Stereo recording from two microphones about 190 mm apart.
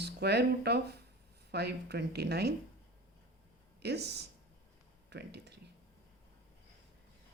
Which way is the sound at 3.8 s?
60° right (ahead or behind).